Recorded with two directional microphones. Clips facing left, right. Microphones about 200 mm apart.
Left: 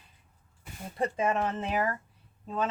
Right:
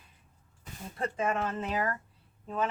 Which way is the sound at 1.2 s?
20° left (ahead or behind).